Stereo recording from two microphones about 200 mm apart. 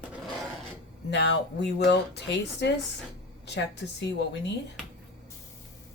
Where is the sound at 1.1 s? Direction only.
60° left (ahead or behind).